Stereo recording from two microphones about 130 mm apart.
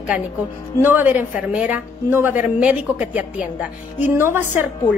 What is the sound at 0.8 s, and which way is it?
A woman's voice, 15° right (ahead or behind).